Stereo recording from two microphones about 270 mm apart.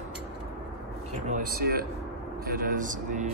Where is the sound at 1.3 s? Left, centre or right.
Right.